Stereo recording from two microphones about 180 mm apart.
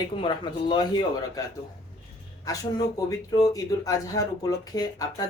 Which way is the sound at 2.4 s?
20° left (ahead or behind).